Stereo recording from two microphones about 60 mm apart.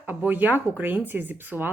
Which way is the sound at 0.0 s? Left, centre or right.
Right.